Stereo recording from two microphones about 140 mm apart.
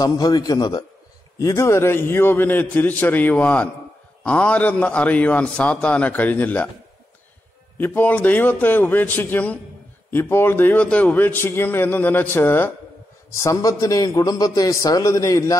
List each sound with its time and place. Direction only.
0.0 s a man's voice: 25° left (ahead or behind); by 6.7 s 10° left (ahead or behind)
7.7 s a man's voice: 10° left (ahead or behind)